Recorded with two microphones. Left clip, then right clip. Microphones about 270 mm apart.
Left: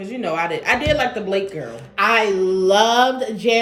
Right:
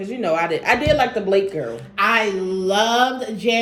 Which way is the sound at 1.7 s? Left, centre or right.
Centre.